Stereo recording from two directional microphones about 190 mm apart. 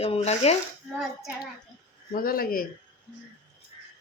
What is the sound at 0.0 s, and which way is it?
Speech, 35° left (ahead or behind).